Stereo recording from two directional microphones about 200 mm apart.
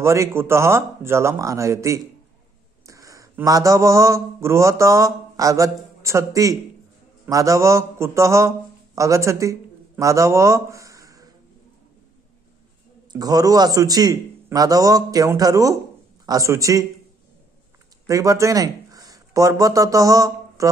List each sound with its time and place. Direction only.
0.0 s a man's voice: 15° right (ahead or behind)
13.1 s a man's voice: 20° right (ahead or behind)
18.0 s speech: 15° right (ahead or behind)